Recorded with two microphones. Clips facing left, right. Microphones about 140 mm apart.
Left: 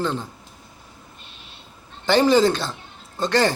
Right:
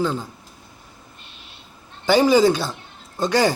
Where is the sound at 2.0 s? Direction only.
5° right (ahead or behind).